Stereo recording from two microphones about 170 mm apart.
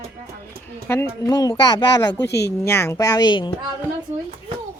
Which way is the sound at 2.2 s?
80° left.